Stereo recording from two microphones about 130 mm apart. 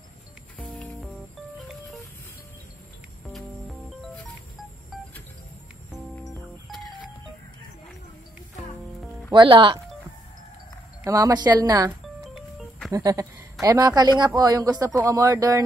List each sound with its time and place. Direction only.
0.6 s music: 5° left (ahead or behind)
4.0 s music: 5° left (ahead or behind)
9.3 s speech: 40° right (ahead or behind)
11.1 s a woman's voice: 25° right (ahead or behind)
12.9 s a woman's voice: 25° right (ahead or behind)